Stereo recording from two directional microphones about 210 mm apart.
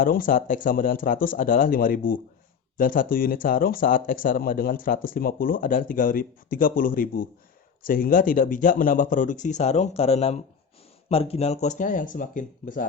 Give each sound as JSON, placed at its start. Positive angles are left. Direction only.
{"t": 0.0, "sound": "speech", "side_deg": 40}